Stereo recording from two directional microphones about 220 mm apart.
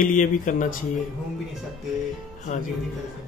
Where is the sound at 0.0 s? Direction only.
35° left (ahead or behind).